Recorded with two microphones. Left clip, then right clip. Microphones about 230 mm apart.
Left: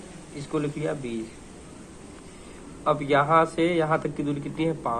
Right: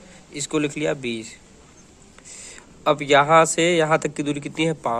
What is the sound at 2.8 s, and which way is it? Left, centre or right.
Speech, right.